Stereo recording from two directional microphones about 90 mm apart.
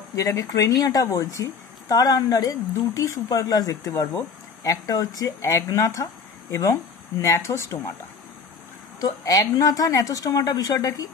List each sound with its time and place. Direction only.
0.1 s speech: 40° left (ahead or behind)
9.0 s speech: 40° left (ahead or behind)